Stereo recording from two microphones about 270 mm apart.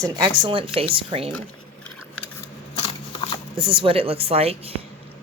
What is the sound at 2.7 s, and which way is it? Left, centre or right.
Shuffling cards, centre.